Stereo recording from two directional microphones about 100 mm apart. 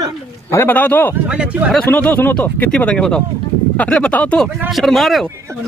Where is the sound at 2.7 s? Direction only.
10° left (ahead or behind).